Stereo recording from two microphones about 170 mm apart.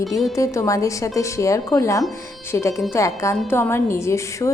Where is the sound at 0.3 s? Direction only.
20° left (ahead or behind).